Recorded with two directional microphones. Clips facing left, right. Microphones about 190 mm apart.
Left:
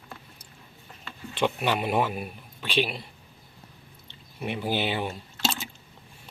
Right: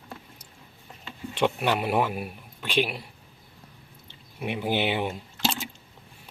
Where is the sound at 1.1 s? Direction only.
10° right (ahead or behind).